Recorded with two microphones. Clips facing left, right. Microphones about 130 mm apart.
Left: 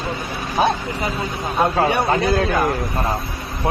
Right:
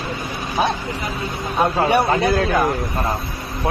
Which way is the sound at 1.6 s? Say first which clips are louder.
Left 1 dB; 20° left (ahead or behind).